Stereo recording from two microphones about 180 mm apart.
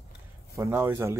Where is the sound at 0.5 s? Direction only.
15° right (ahead or behind).